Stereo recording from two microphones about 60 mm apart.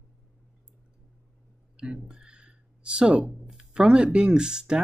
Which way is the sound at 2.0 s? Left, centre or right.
Centre.